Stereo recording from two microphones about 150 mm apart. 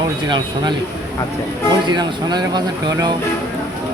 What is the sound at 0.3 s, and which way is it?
Speech, 30° right (ahead or behind).